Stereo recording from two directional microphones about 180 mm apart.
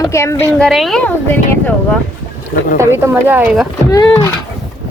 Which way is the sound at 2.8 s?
15° right (ahead or behind).